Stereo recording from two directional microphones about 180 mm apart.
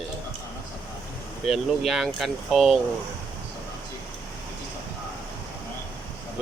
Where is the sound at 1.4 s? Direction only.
Centre (ahead or behind).